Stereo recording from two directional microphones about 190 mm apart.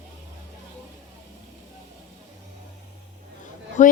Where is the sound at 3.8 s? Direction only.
40° left (ahead or behind).